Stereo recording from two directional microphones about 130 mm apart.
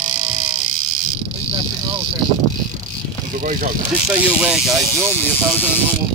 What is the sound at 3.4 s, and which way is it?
Speech, 90° right.